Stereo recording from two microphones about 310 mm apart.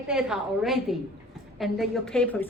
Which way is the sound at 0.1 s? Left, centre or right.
Centre.